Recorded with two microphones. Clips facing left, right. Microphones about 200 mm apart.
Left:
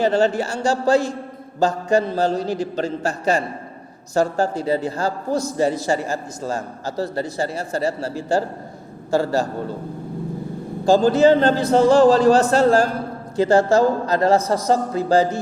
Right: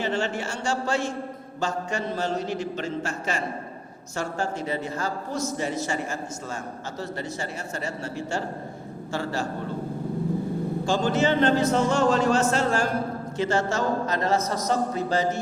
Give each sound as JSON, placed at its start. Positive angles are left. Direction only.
{"t": 0.0, "sound": "a man's voice", "side_deg": 35}
{"t": 10.8, "sound": "a man's voice", "side_deg": 35}